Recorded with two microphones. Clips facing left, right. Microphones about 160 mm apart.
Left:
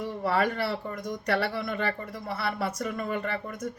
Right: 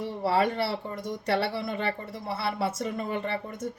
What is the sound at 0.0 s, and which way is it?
Speech, 25° right (ahead or behind).